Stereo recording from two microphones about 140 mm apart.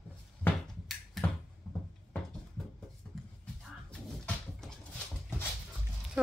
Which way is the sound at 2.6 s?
5° left (ahead or behind).